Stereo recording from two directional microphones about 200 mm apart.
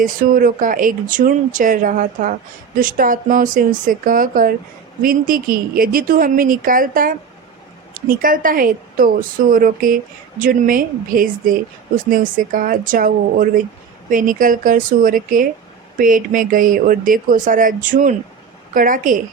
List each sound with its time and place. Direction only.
0.0 s a woman's voice: 45° right (ahead or behind)